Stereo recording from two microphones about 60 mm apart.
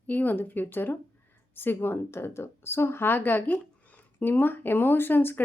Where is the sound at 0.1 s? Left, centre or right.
Left.